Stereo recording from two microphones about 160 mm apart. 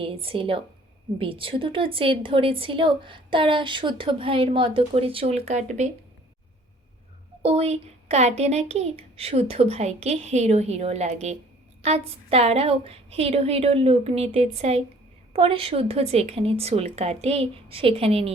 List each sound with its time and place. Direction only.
0.0 s speech: 35° right (ahead or behind)
7.4 s speech: 40° right (ahead or behind)